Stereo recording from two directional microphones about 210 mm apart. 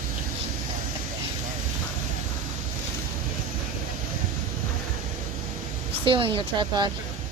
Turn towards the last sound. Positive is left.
turn(degrees=-20)  # may be behind; listen again after turning